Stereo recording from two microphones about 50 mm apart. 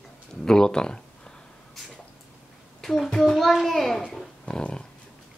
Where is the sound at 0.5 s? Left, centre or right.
Centre.